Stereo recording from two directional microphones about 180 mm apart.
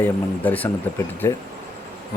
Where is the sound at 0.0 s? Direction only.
10° left (ahead or behind).